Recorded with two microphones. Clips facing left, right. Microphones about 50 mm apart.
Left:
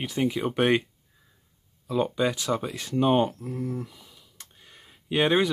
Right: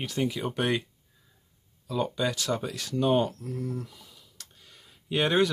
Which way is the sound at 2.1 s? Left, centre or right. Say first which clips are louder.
Left 3 dB; centre.